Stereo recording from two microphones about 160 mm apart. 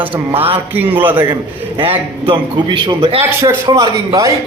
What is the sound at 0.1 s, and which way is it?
Speech, 30° right (ahead or behind).